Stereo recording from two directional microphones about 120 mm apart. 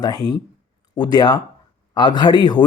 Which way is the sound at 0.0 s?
35° left (ahead or behind).